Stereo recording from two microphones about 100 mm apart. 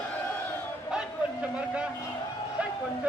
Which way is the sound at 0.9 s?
10° right (ahead or behind).